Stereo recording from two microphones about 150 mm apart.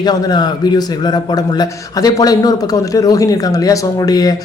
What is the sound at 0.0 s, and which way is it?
Speech, 30° left (ahead or behind).